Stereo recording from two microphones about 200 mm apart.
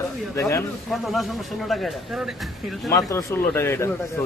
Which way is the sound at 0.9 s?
Centre (ahead or behind).